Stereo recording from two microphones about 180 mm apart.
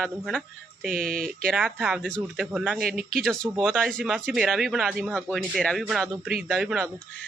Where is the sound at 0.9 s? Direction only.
50° right (ahead or behind).